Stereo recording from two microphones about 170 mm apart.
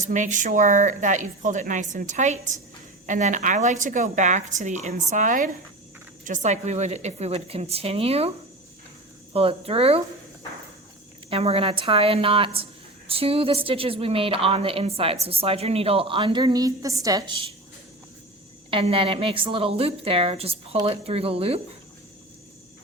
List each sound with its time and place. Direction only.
0.1 s a woman's voice: 45° right (ahead or behind)
9.3 s a woman's voice: 35° right (ahead or behind)
11.3 s a woman's voice: 35° right (ahead or behind)
18.7 s a woman's voice: 30° right (ahead or behind)